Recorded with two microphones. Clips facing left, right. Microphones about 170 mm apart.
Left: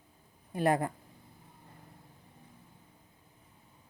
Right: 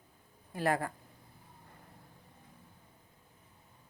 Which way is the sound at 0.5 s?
20° left (ahead or behind).